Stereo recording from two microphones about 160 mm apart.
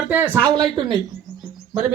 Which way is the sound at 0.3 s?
10° left (ahead or behind).